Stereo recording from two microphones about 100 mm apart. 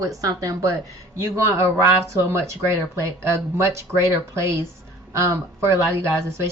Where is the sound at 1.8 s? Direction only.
25° right (ahead or behind).